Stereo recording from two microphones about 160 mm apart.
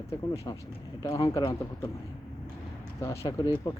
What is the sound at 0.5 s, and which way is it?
Speech, 25° left (ahead or behind).